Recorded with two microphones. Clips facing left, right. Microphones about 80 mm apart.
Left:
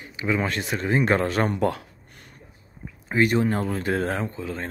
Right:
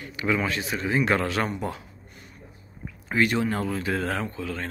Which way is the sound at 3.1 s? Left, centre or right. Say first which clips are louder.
Left 3 dB; left.